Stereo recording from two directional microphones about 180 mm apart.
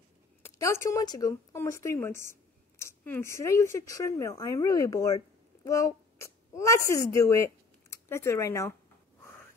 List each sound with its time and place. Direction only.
0.4 s a woman's voice: 15° left (ahead or behind)